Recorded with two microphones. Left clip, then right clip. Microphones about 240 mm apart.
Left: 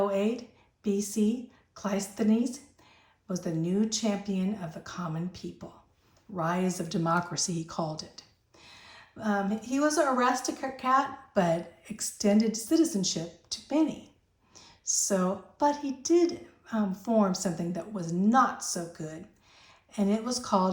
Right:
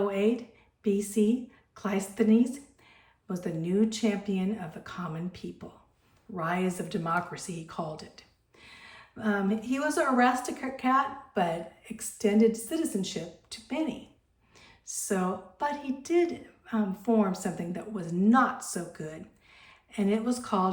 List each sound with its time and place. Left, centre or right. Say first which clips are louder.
0.1 s speech: right 1 dB; centre